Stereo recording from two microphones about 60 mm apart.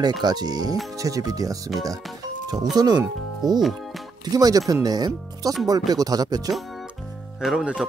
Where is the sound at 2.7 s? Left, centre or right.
Right.